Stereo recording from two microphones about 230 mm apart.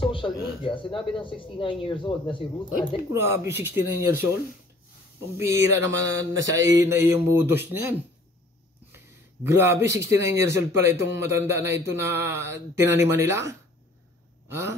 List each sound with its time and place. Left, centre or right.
0.0 s speech: left
3.1 s a man's voice: centre
5.4 s a man's voice: centre
9.4 s a man's voice: centre
14.5 s gasp: centre